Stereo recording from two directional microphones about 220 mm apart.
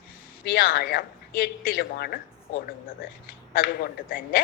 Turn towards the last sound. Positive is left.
turn(degrees=40)  # may be behind; listen again after turning